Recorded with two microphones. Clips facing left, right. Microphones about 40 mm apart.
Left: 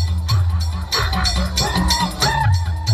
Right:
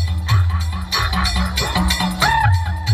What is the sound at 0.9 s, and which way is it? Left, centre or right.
Music, centre.